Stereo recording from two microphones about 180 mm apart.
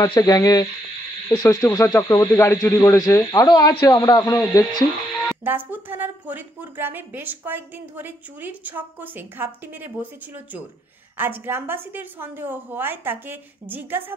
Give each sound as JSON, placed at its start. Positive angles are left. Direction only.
{"t": 0.0, "sound": "speech", "side_deg": 20}
{"t": 5.1, "sound": "music", "side_deg": 5}
{"t": 5.4, "sound": "a woman's voice", "side_deg": -10}